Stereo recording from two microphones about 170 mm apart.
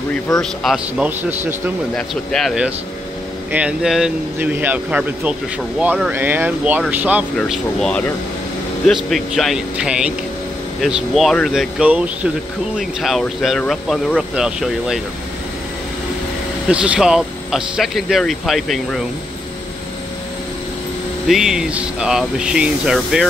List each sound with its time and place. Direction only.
0.4 s speech: 5° right (ahead or behind)
2.0 s speech: centre (ahead or behind)
16.6 s speech: 5° right (ahead or behind)
21.3 s speech: 5° right (ahead or behind)